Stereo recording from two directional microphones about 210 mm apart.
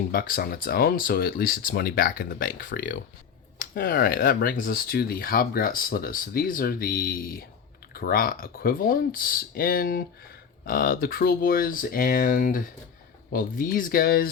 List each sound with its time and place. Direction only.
0.1 s speech: 45° left (ahead or behind)